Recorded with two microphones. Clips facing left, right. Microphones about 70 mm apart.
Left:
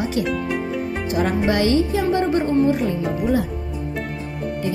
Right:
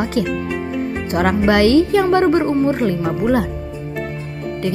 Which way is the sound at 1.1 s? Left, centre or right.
Right.